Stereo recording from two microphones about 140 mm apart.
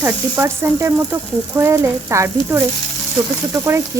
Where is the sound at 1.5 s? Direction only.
20° right (ahead or behind).